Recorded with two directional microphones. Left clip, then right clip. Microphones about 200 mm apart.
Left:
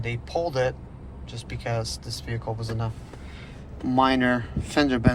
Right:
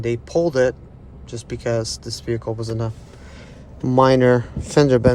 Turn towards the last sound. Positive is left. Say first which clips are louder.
# right 8 dB
turn(degrees=-35)  # may be behind; listen again after turning